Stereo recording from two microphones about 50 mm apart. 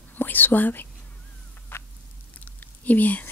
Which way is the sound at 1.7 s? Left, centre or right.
Left.